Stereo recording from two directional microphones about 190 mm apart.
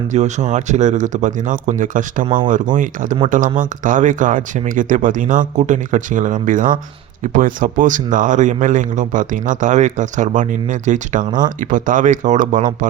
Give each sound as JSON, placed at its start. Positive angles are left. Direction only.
{"t": 0.1, "sound": "speech", "side_deg": -40}